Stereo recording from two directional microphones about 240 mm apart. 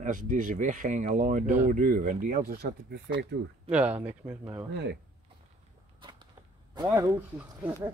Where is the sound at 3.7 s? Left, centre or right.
Centre.